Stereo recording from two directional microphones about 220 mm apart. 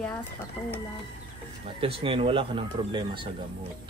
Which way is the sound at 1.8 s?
25° right (ahead or behind).